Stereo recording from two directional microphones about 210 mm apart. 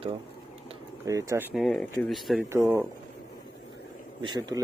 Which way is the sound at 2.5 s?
10° right (ahead or behind).